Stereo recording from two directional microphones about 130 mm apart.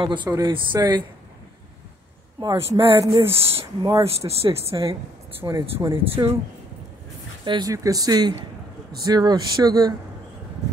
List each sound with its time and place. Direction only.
0.0 s speech: 35° right (ahead or behind)
2.4 s speech: 25° right (ahead or behind)
3.0 s speech: 45° right (ahead or behind)
3.8 s speech: 25° right (ahead or behind)
4.3 s speech: 50° right (ahead or behind)
4.6 s speech: 25° right (ahead or behind)
6.0 s speech: 45° right (ahead or behind)
7.4 s speech: 40° right (ahead or behind)
7.7 s speech: 25° right (ahead or behind)